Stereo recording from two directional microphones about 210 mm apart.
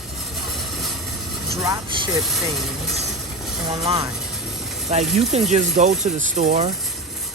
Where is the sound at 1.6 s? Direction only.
15° right (ahead or behind).